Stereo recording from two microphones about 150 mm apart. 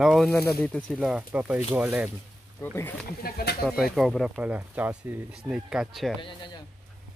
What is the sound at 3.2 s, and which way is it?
Speech, 90° left.